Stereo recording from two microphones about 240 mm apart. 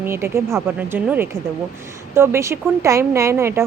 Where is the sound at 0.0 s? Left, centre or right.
Centre.